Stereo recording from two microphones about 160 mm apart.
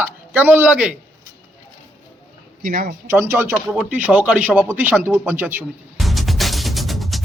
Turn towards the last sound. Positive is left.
turn(degrees=0)  # may be behind; listen again after turning